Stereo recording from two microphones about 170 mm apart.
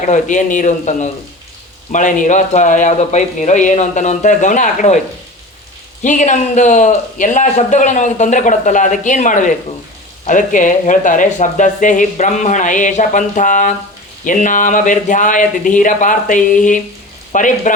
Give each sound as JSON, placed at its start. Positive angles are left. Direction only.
{"t": 0.0, "sound": "a man's voice", "side_deg": 45}
{"t": 6.0, "sound": "a man's voice", "side_deg": 45}